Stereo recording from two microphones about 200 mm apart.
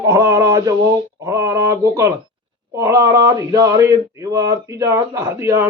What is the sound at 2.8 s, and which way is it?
Speech, 15° right (ahead or behind).